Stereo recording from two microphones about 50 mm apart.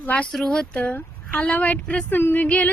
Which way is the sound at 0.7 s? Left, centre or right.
Left.